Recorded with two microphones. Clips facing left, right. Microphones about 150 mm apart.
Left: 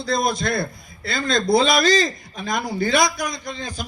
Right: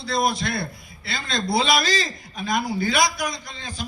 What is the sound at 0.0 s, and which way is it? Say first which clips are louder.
A man's voice: left 2 dB; 45° left (ahead or behind).